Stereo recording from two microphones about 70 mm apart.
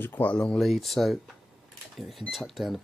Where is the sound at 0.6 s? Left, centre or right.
Centre.